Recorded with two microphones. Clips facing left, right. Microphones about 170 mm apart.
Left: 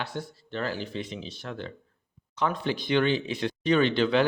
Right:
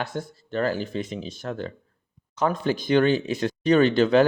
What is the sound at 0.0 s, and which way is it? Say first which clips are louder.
Speech: right 4 dB; 45° right (ahead or behind).